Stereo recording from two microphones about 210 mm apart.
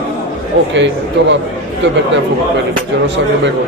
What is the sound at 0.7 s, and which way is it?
Speech, 60° right (ahead or behind).